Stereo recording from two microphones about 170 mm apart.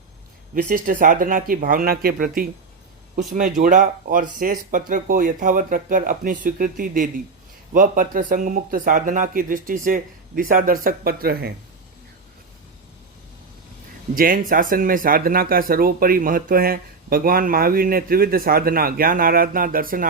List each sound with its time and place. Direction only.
0.5 s speech: 50° right (ahead or behind)
14.2 s speech: 55° right (ahead or behind)